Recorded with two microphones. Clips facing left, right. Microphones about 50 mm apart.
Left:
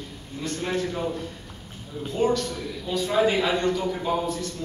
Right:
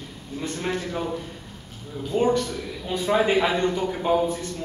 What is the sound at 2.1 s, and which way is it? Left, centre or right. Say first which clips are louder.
A man's voice: right 2 dB; right.